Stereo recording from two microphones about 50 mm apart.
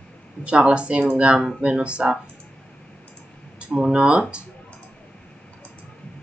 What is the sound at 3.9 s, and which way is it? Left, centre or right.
Speech, right.